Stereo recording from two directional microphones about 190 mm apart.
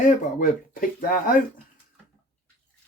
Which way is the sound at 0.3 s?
45° left (ahead or behind).